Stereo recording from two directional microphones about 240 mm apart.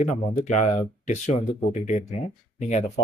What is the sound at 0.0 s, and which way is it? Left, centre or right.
A man's voice, left.